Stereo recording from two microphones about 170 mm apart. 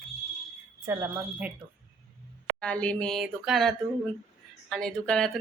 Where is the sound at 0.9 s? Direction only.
10° right (ahead or behind).